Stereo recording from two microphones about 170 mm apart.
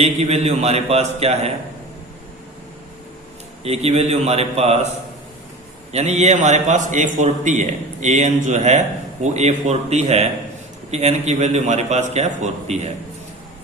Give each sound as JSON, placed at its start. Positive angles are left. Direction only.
{"t": 0.0, "sound": "a man's voice", "side_deg": -40}
{"t": 3.6, "sound": "a man's voice", "side_deg": -35}
{"t": 5.9, "sound": "a man's voice", "side_deg": -40}